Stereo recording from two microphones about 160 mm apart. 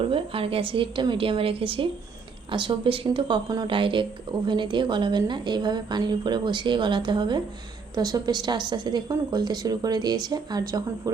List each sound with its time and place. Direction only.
0.0 s a woman's voice: 35° right (ahead or behind)